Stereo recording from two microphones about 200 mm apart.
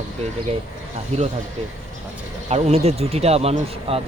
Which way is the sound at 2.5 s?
30° right (ahead or behind).